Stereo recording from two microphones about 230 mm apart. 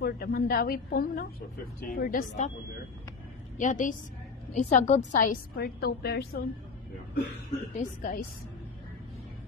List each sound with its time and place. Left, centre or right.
0.0 s a woman's voice: left
3.5 s a woman's voice: left
7.7 s a woman's voice: left